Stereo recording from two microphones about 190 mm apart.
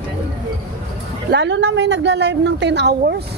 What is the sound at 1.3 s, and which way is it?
A woman's voice, 65° right (ahead or behind).